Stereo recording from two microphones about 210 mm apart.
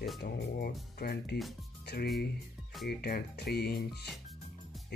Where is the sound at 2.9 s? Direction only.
50° left (ahead or behind).